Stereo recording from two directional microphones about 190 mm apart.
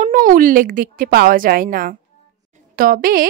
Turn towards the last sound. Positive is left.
turn(degrees=-50)  # may be behind; listen again after turning